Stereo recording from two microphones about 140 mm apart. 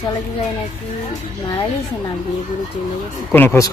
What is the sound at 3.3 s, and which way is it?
Speech, 15° left (ahead or behind).